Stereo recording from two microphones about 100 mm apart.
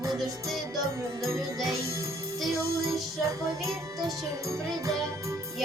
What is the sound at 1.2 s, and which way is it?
Music, 30° right (ahead or behind).